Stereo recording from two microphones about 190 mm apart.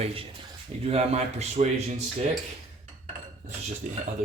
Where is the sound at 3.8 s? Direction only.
45° right (ahead or behind).